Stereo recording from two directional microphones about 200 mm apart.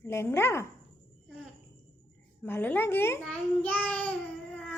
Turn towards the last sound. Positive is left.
turn(degrees=5)  # may be behind; listen again after turning